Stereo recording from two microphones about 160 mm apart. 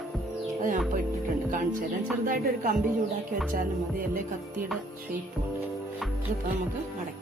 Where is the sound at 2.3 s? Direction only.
60° right (ahead or behind).